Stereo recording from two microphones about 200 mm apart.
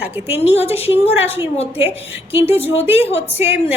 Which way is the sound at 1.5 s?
30° left (ahead or behind).